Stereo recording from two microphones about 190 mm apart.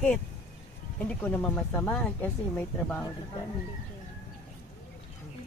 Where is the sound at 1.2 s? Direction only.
10° left (ahead or behind).